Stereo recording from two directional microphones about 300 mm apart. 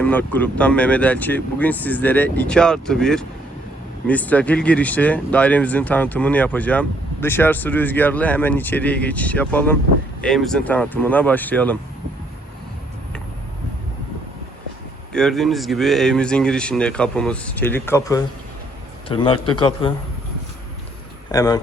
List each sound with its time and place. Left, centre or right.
0.0 s speech: centre
15.1 s a man's voice: centre
21.3 s a man's voice: centre